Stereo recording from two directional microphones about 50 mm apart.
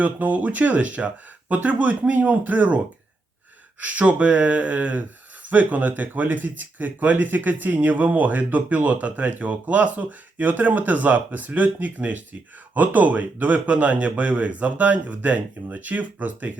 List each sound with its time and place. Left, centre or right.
0.0 s speech: right